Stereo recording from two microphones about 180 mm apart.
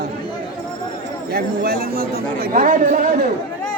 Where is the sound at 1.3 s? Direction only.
55° right (ahead or behind).